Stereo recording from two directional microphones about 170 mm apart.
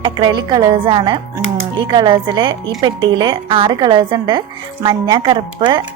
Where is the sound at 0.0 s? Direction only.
25° right (ahead or behind).